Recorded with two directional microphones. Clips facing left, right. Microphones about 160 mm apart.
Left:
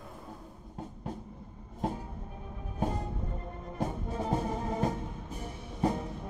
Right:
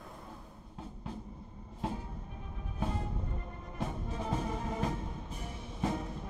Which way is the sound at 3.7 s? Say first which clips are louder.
Left 4 dB; 40° left (ahead or behind).